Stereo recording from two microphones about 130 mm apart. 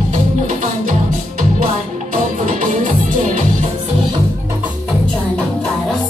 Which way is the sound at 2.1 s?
90° right.